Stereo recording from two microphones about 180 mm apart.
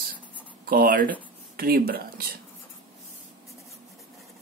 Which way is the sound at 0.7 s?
50° right (ahead or behind).